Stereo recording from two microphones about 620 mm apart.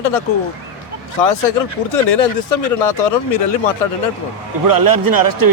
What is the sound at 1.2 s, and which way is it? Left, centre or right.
Speech, left.